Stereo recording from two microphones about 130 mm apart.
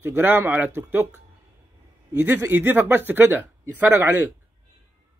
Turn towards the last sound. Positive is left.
turn(degrees=-15)  # may be behind; listen again after turning